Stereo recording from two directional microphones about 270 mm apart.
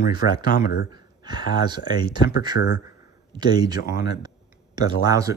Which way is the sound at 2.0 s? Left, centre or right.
Left.